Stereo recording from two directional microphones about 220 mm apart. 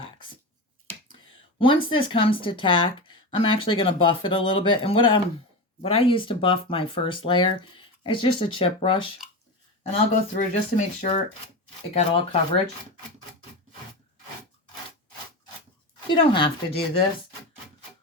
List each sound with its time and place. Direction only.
1.5 s speech: 25° left (ahead or behind)
10.3 s speech: 30° left (ahead or behind)
16.0 s speech: 20° left (ahead or behind)